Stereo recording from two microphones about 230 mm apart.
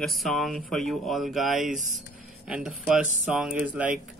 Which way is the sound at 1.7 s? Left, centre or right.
Right.